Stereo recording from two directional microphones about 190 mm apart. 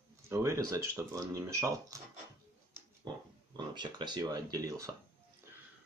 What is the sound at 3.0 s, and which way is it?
Pig, 20° right (ahead or behind).